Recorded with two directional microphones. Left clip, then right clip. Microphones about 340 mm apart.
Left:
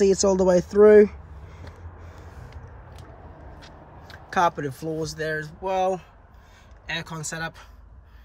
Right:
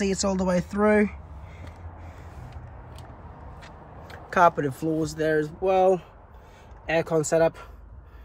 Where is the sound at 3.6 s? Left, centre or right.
Centre.